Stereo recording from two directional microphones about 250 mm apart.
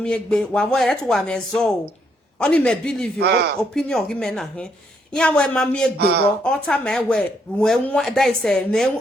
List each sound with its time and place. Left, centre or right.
0.0 s speech: centre
3.2 s speech: right
3.6 s speech: centre
6.0 s speech: right
6.4 s speech: centre